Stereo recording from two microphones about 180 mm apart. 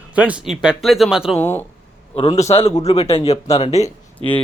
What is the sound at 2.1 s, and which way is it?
Speech, 35° left (ahead or behind).